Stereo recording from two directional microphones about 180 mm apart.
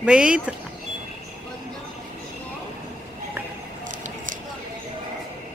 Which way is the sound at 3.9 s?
45° right (ahead or behind).